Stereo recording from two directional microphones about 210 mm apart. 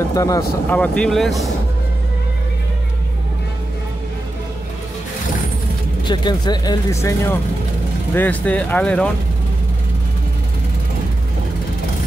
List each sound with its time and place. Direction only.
0.1 s speech: 15° left (ahead or behind)
0.7 s speech: 5° left (ahead or behind)
6.0 s speech: 20° left (ahead or behind); by 9.1 s 5° left (ahead or behind)